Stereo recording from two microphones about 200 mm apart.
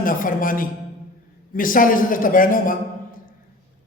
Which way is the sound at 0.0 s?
45° left (ahead or behind).